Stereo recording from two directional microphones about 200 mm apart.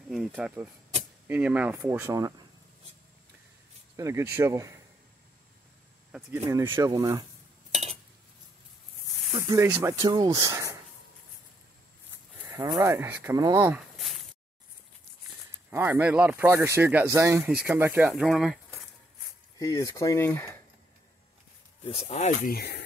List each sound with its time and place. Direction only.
0.1 s speech: centre (ahead or behind)
3.9 s speech: 15° right (ahead or behind)
6.1 s speech: 10° right (ahead or behind)
7.7 s dishes: 30° right (ahead or behind)
9.5 s speech: 10° right (ahead or behind)
12.5 s speech: 15° right (ahead or behind)
15.7 s speech: 10° right (ahead or behind)
19.6 s speech: 15° left (ahead or behind)
21.9 s speech: 35° left (ahead or behind)
22.5 s speech: 55° left (ahead or behind)